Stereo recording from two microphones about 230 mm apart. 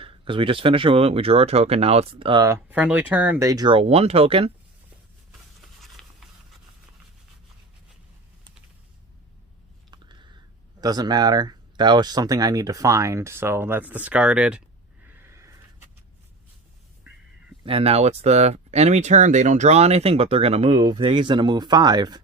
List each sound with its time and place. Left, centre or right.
0.0 s speech: right
2.6 s speech: centre; by 4.5 s right
5.8 s patter: centre
9.9 s a sound: centre
10.8 s speech: centre
15.0 s a sound: centre
17.7 s speech: right